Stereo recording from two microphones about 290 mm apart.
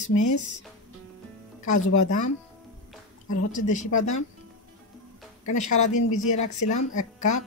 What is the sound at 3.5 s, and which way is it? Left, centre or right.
Speech, left.